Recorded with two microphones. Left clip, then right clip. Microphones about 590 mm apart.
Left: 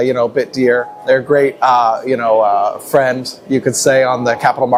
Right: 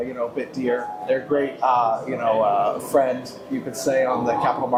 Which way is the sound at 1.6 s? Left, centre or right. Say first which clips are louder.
Left 5 dB; left.